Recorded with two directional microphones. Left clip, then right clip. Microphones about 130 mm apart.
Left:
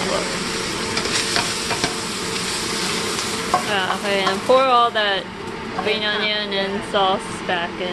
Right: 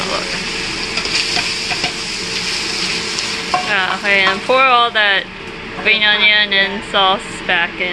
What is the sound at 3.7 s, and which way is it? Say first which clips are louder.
Speech: right 6 dB; 15° left (ahead or behind).